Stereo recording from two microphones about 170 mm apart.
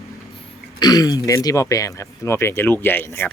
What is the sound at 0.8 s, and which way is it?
Speech, 25° left (ahead or behind).